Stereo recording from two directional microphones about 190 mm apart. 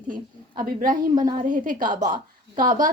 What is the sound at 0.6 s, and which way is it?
A woman's voice, 45° right (ahead or behind).